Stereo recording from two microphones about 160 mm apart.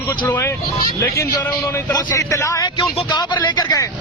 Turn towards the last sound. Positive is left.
turn(degrees=25)  # may be behind; listen again after turning